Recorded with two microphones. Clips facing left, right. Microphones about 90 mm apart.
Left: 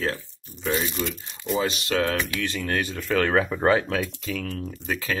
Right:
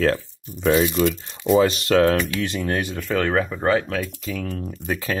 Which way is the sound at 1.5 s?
45° right (ahead or behind).